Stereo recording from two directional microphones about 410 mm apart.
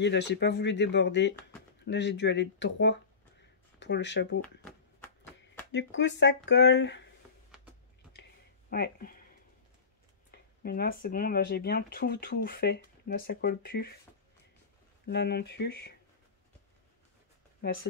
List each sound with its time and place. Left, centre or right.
0.0 s speech: left
5.7 s speech: left
8.1 s a sound: left
10.3 s speech: left
15.0 s speech: left
17.6 s speech: left